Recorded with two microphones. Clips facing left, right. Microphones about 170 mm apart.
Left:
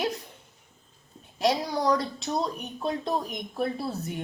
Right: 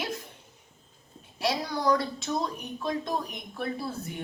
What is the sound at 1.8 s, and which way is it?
Speech, 30° left (ahead or behind).